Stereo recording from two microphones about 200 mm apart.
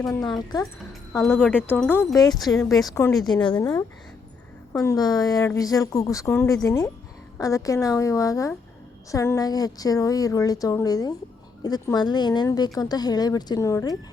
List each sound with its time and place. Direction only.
0.0 s speech: 20° left (ahead or behind)
1.3 s speech: 10° left (ahead or behind)